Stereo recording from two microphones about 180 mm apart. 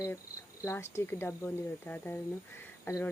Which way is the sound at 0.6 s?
15° left (ahead or behind).